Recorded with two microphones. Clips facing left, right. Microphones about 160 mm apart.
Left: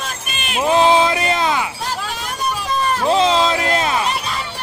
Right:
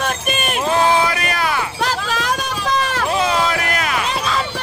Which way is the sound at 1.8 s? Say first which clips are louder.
Right 4 dB; 90° right.